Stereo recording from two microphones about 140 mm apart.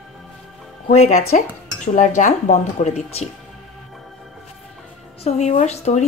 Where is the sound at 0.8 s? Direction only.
60° left (ahead or behind).